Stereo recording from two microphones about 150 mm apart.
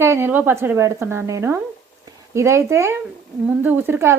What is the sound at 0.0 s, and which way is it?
A woman's voice, 15° right (ahead or behind).